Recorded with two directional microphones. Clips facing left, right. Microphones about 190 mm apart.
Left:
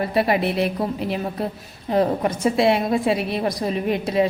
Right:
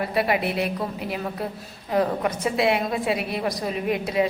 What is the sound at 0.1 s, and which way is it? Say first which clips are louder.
Speech: left 3 dB; 30° left (ahead or behind).